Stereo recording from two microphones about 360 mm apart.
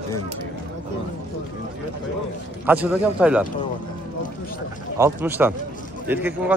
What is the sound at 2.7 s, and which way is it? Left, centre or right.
Speech, centre.